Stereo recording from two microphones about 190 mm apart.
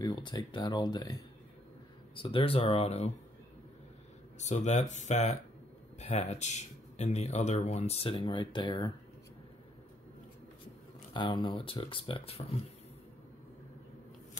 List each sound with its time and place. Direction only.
0.0 s speech: 25° left (ahead or behind)
2.1 s speech: 30° left (ahead or behind)
4.4 s speech: 35° left (ahead or behind)
11.1 s speech: 25° left (ahead or behind)